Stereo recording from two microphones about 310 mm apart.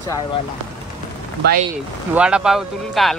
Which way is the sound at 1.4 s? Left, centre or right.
Right.